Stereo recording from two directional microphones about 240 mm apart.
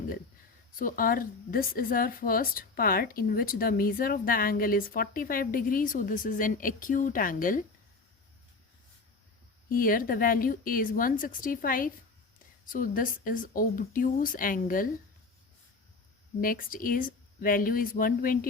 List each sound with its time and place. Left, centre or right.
0.8 s a woman's voice: left
9.6 s a woman's voice: left
16.4 s a woman's voice: left